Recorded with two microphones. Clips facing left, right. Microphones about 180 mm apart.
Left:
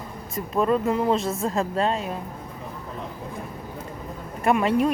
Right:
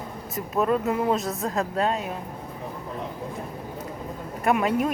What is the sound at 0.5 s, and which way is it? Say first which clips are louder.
A woman's voice: left 1 dB; 5° right (ahead or behind).